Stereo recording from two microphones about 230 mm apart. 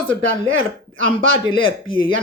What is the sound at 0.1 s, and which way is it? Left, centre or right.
Speech, right.